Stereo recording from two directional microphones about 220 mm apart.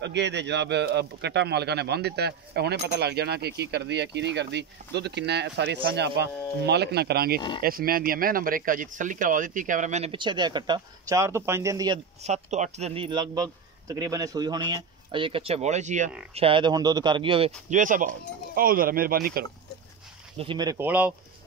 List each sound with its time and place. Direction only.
0.0 s speech: 50° right (ahead or behind); by 12.0 s 15° right (ahead or behind)
12.2 s speech: 30° right (ahead or behind)
17.6 s speech: 35° right (ahead or behind)
20.3 s speech: 20° right (ahead or behind)